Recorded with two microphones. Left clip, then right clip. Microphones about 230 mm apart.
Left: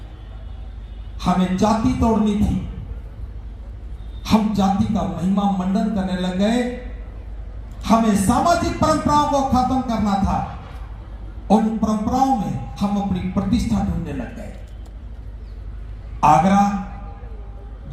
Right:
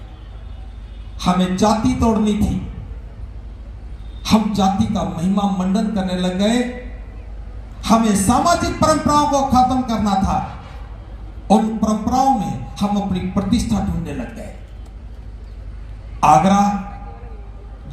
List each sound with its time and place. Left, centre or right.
1.2 s speech: right
4.2 s speech: right
7.8 s speech: right
11.4 s speech: right
16.2 s throat clearing: right